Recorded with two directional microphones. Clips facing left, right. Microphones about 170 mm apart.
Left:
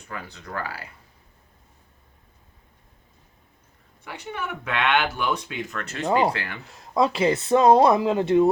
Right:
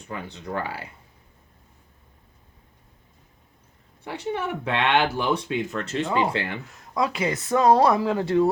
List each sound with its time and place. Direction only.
0.1 s speech: 25° right (ahead or behind)
4.0 s speech: 30° right (ahead or behind)
6.1 s speech: 40° left (ahead or behind)
6.3 s speech: 25° right (ahead or behind)
6.7 s speech: 25° left (ahead or behind)